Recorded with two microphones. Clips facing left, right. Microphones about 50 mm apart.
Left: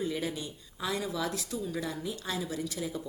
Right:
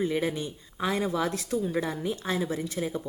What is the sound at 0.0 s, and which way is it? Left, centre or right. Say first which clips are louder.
Speech: right 6 dB; right.